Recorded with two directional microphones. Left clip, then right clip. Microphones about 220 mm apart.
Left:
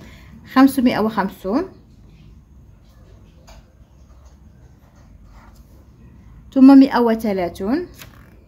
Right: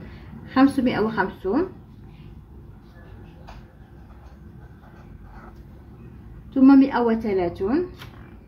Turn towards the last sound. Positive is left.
turn(degrees=60)  # may be behind; listen again after turning